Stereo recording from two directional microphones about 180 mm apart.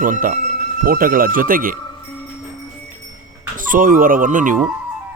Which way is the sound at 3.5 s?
50° right (ahead or behind).